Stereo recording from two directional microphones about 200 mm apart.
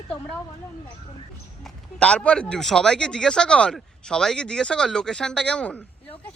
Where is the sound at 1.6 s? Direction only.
5° left (ahead or behind).